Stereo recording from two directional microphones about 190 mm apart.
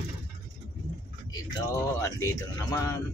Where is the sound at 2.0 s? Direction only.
15° left (ahead or behind).